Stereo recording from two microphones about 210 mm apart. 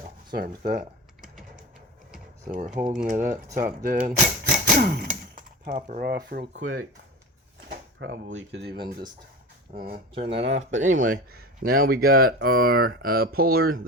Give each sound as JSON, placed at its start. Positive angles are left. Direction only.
{"t": 0.3, "sound": "speech", "side_deg": -45}
{"t": 1.2, "sound": "a sound", "side_deg": -5}
{"t": 2.4, "sound": "speech", "side_deg": -40}
{"t": 6.5, "sound": "speech", "side_deg": -65}
{"t": 7.9, "sound": "speech", "side_deg": -60}
{"t": 10.2, "sound": "speech", "side_deg": -60}
{"t": 10.6, "sound": "speech", "side_deg": -35}